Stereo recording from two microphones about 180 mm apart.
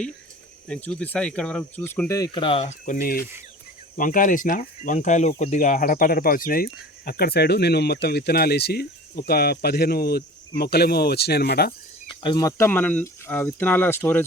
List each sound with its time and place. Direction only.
0.7 s speech: 5° left (ahead or behind); by 11.7 s 60° left (ahead or behind)
12.0 s speech: 25° left (ahead or behind)